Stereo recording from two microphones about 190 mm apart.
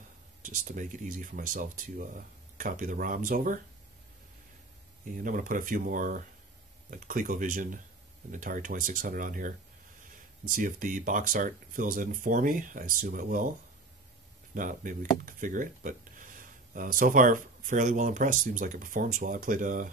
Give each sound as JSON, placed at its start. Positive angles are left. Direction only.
{"t": 0.4, "sound": "speech", "side_deg": -45}
{"t": 5.1, "sound": "speech", "side_deg": -45}
{"t": 14.5, "sound": "speech", "side_deg": -45}